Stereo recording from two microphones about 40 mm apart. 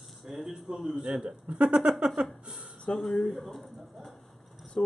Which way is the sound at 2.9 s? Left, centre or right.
Left.